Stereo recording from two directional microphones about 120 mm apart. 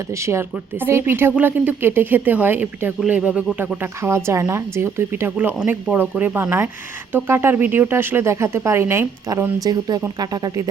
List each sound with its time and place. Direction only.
0.1 s speech: 25° right (ahead or behind)